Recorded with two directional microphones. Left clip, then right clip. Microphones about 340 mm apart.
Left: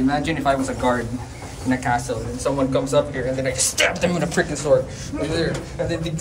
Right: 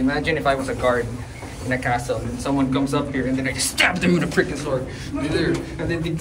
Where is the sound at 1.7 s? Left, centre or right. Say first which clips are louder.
Even; centre.